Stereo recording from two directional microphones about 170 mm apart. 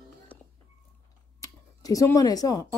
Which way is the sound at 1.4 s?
20° left (ahead or behind).